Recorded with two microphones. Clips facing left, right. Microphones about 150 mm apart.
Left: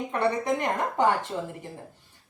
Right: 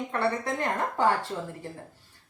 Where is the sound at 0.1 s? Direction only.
15° left (ahead or behind).